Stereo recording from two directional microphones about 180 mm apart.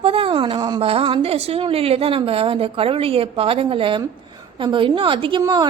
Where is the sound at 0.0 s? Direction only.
30° right (ahead or behind).